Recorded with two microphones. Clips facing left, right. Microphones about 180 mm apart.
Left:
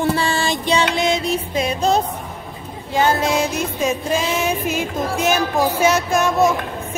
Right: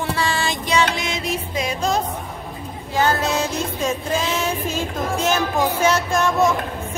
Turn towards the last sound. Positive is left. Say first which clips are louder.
# left 2 dB
turn(degrees=10)  # may be behind; listen again after turning